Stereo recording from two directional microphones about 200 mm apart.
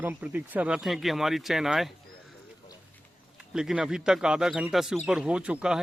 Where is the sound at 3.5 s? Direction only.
5° right (ahead or behind).